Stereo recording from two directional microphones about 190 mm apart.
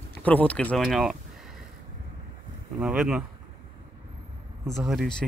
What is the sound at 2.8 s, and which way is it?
Speech, 5° right (ahead or behind).